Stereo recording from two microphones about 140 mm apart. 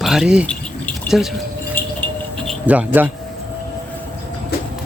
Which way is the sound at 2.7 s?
10° right (ahead or behind).